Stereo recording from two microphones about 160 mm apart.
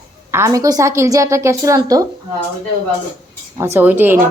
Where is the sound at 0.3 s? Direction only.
15° right (ahead or behind).